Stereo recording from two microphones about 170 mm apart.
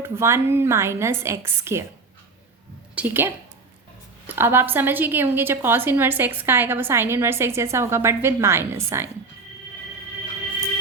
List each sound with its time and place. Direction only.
0.0 s a woman's voice: 15° right (ahead or behind)
2.9 s a woman's voice: 10° right (ahead or behind)